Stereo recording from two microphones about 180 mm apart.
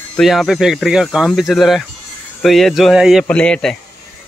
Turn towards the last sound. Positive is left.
turn(degrees=5)  # may be behind; listen again after turning